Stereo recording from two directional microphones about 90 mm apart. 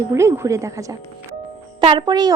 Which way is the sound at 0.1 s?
30° right (ahead or behind).